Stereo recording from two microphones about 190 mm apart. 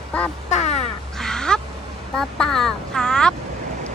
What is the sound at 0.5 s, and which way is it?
Crow, 35° left (ahead or behind).